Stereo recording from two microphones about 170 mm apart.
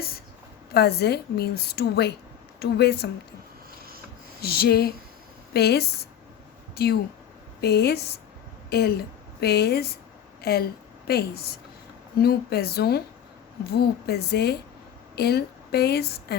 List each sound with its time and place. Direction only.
0.7 s a woman's voice: 70° left (ahead or behind)
4.4 s a woman's voice: 65° left (ahead or behind)